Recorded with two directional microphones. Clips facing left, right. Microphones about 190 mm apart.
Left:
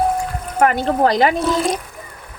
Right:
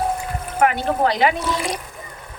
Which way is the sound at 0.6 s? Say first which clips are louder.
Left 3 dB; 40° left (ahead or behind).